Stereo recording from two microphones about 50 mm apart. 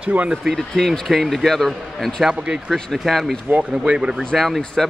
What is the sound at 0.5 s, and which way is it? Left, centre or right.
Speech, centre.